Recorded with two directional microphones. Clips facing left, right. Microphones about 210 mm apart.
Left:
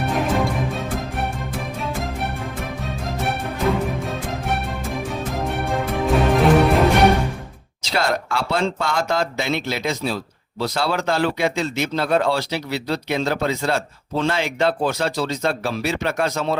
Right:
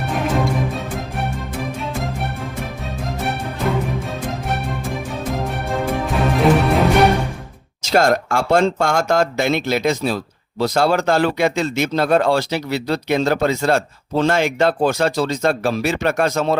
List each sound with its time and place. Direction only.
2.8 s music: centre (ahead or behind)
7.8 s speech: 45° right (ahead or behind)